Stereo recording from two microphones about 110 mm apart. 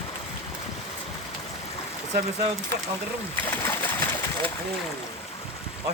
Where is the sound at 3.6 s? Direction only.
20° left (ahead or behind).